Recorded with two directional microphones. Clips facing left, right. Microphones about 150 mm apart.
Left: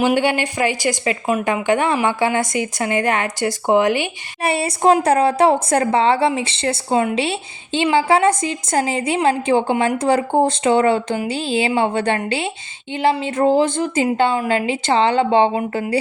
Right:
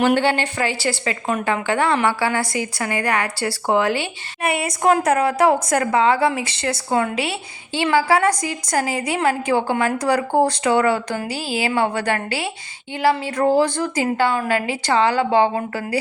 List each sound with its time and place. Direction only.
0.2 s a woman's voice: 15° left (ahead or behind)
4.4 s speech: 30° left (ahead or behind)